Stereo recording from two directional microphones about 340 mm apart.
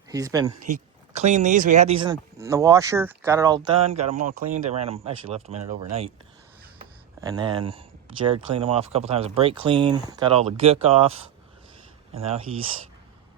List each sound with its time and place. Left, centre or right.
0.1 s speech: centre
1.1 s speech: centre
6.7 s a sound: centre
8.3 s speech: centre